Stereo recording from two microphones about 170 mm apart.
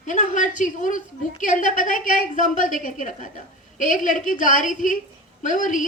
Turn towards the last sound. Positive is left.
turn(degrees=50)  # may be behind; listen again after turning